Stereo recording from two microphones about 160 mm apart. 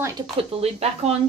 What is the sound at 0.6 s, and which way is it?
Speech, 40° right (ahead or behind).